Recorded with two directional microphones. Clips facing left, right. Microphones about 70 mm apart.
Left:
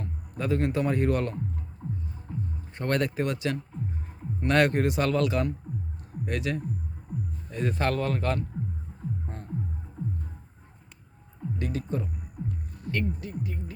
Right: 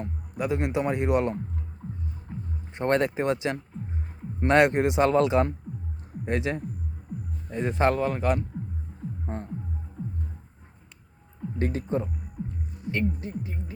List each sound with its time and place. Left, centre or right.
0.0 s a man's voice: centre
1.8 s music: centre
2.3 s music: right
2.7 s speech: right
9.2 s music: right
11.6 s speech: right